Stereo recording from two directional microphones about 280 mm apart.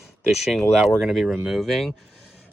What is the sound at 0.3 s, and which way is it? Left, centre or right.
Speech, centre.